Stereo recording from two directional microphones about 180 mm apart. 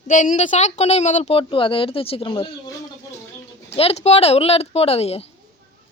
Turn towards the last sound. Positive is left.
turn(degrees=35)  # may be behind; listen again after turning